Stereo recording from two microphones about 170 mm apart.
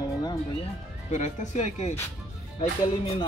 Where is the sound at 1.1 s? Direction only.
45° left (ahead or behind).